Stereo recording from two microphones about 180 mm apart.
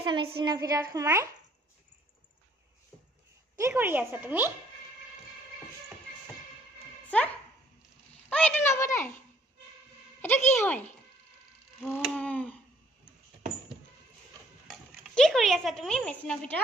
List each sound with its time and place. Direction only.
0.0 s a woman's voice: 25° right (ahead or behind)
3.5 s a woman's voice: 15° right (ahead or behind)
7.1 s speech: 5° left (ahead or behind)
10.2 s speech: 10° left (ahead or behind)
12.0 s a sound: 5° left (ahead or behind)
14.7 s speech: centre (ahead or behind)